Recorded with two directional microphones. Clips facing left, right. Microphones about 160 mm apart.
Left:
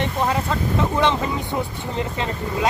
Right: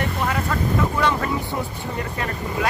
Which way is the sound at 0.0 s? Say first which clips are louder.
Left 2 dB; 25° left (ahead or behind).